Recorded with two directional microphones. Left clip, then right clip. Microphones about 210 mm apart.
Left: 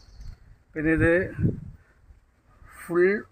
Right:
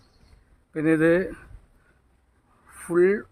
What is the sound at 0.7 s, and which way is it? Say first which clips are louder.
Speech: right 2 dB; 20° right (ahead or behind).